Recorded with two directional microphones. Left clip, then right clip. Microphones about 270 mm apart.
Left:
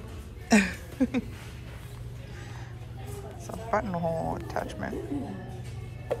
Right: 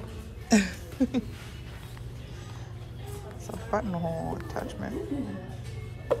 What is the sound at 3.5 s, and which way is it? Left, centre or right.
Speech, centre.